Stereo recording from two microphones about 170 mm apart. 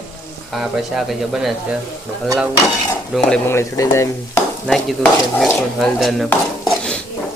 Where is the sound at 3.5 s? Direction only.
15° left (ahead or behind).